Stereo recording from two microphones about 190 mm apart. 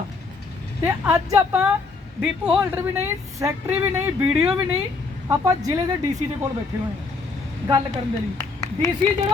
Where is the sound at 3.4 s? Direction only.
15° right (ahead or behind).